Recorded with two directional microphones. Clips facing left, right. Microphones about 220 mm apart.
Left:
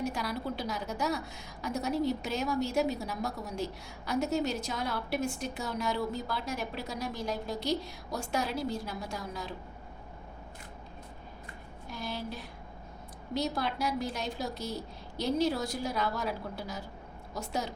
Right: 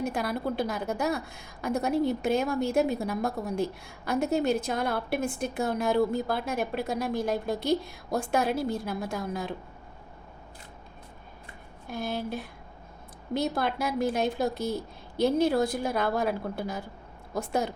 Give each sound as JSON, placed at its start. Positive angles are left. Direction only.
{"t": 0.0, "sound": "a woman's voice", "side_deg": -55}
{"t": 11.9, "sound": "a woman's voice", "side_deg": -55}